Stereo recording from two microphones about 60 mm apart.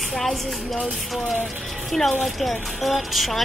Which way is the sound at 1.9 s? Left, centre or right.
Centre.